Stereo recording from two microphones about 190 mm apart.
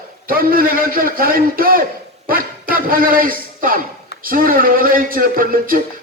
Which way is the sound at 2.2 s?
50° right (ahead or behind).